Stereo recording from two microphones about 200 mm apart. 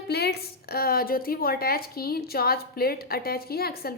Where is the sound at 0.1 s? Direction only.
55° left (ahead or behind).